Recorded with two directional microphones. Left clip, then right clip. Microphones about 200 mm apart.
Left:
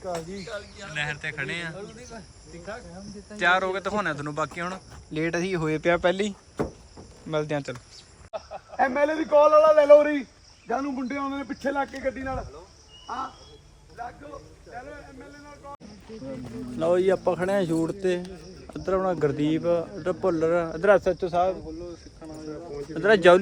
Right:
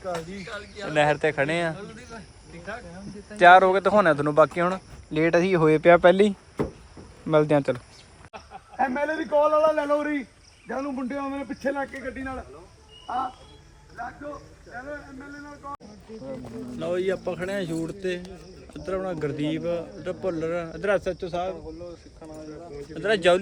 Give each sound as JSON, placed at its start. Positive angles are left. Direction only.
{"t": 0.9, "sound": "speech", "side_deg": -5}
{"t": 1.7, "sound": "speech", "side_deg": 40}
{"t": 3.3, "sound": "speech", "side_deg": 5}
{"t": 8.8, "sound": "a man's voice", "side_deg": 20}
{"t": 12.0, "sound": "speech", "side_deg": 45}
{"t": 13.1, "sound": "speech", "side_deg": 5}
{"t": 16.7, "sound": "speech", "side_deg": 10}
{"t": 23.0, "sound": "a man's voice", "side_deg": 25}